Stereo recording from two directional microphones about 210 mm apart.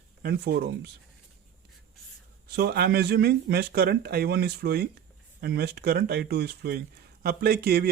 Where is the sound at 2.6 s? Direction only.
50° right (ahead or behind).